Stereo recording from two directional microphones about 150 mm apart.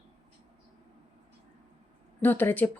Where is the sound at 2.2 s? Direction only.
10° left (ahead or behind).